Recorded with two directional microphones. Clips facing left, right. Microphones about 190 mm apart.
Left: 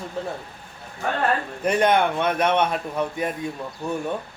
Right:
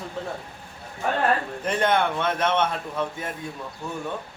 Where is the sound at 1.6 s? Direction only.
15° left (ahead or behind).